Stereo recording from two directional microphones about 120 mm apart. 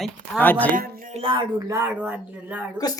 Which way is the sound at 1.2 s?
40° right (ahead or behind).